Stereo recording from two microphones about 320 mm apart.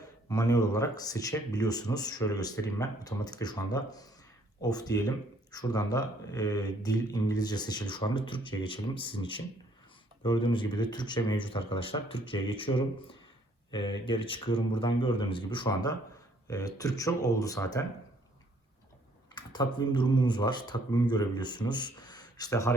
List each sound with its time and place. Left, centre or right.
0.3 s speech: centre
19.3 s speech: centre